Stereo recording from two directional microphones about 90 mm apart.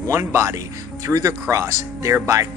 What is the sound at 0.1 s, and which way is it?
Speech, 30° right (ahead or behind).